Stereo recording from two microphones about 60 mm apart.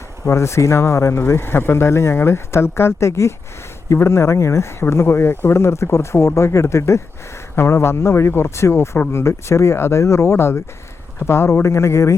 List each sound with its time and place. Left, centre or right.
0.3 s speech: left